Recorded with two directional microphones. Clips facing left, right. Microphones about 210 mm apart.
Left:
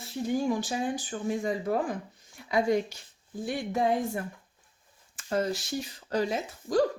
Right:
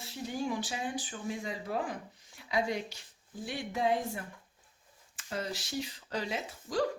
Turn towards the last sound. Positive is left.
turn(degrees=45)  # may be behind; listen again after turning